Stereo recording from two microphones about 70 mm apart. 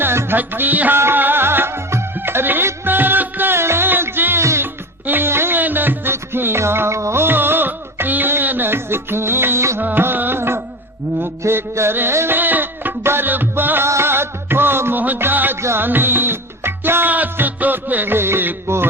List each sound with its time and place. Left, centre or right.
0.0 s music: right